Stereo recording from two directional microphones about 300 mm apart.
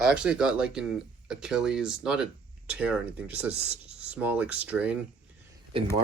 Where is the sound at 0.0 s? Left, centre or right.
Centre.